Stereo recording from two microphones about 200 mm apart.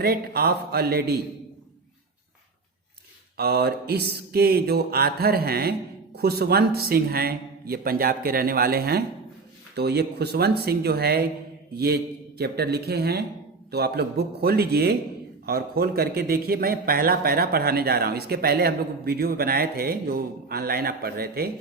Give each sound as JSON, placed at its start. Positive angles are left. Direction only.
{"t": 0.0, "sound": "a man's voice", "side_deg": -50}
{"t": 3.3, "sound": "a man's voice", "side_deg": -50}
{"t": 12.4, "sound": "a man's voice", "side_deg": -55}